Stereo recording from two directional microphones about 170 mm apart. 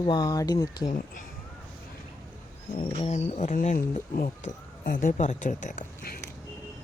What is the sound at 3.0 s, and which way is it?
Speech, 40° left (ahead or behind).